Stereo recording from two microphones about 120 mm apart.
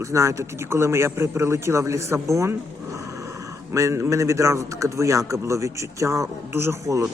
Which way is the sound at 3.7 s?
25° right (ahead or behind).